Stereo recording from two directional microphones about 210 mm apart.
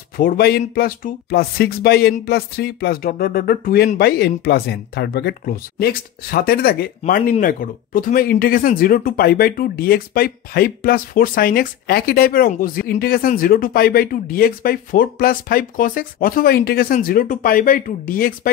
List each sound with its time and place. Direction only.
0.2 s speech: 45° left (ahead or behind)